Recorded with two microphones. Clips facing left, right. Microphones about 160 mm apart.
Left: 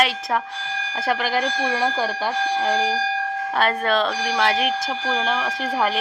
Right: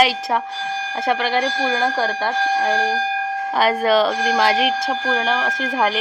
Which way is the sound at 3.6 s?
5° right (ahead or behind).